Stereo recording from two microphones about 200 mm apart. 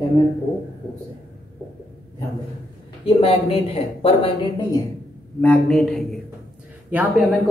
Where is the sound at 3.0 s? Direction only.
30° left (ahead or behind).